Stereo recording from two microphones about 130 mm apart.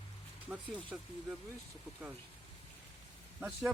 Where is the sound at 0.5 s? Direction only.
5° right (ahead or behind).